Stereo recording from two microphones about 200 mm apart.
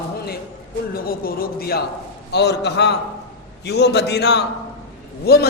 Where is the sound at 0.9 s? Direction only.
45° left (ahead or behind).